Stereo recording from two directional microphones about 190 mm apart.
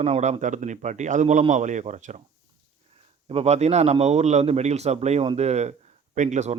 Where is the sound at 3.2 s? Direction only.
35° right (ahead or behind).